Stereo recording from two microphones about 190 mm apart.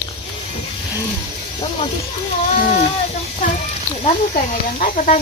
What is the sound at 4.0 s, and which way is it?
Speech, 45° left (ahead or behind).